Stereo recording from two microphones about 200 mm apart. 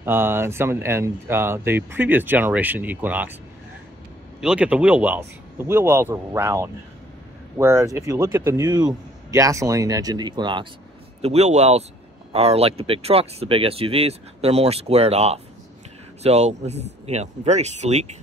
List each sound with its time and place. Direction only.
0.0 s speech: 10° right (ahead or behind)
4.4 s speech: 5° right (ahead or behind); by 18.0 s 35° right (ahead or behind)